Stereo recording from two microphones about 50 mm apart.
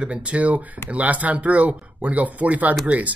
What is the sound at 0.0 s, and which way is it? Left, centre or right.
Speech, right.